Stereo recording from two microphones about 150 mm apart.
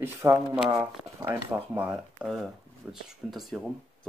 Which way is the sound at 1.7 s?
10° right (ahead or behind).